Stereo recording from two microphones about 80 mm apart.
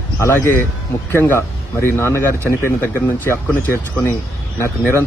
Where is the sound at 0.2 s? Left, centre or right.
Left.